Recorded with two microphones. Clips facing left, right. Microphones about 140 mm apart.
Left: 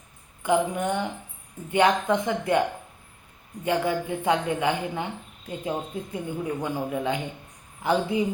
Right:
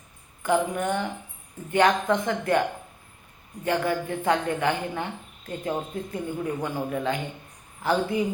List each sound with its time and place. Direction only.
0.4 s speech: 15° left (ahead or behind)